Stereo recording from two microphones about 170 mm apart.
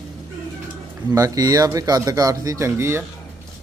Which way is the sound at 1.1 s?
20° right (ahead or behind).